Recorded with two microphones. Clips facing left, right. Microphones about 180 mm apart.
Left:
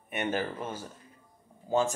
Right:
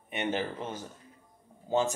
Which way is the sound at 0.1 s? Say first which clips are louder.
Left 1 dB; 20° right (ahead or behind).